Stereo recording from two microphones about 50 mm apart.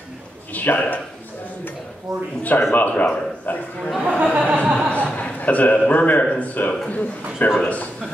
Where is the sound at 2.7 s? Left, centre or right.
Left.